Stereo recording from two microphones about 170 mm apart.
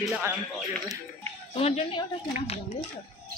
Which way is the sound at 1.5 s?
35° left (ahead or behind).